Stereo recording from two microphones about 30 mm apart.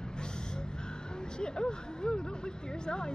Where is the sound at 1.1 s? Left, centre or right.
Left.